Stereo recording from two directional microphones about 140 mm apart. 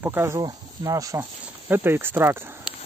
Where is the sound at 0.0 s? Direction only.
20° right (ahead or behind).